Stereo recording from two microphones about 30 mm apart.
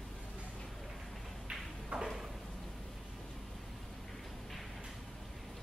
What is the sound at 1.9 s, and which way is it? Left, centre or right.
Drawer open or close, right.